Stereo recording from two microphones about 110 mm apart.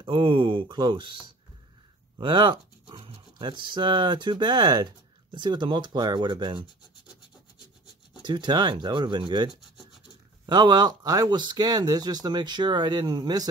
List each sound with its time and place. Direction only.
0.0 s speech: 50° right (ahead or behind)
8.3 s speech: 45° right (ahead or behind)